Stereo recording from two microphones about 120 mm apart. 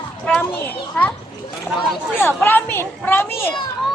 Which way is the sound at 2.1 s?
15° left (ahead or behind).